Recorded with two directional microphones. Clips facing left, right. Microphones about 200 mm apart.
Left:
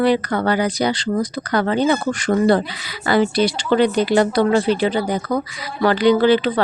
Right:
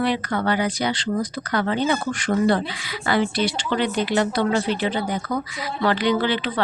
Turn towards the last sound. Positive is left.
turn(degrees=40)  # may be behind; listen again after turning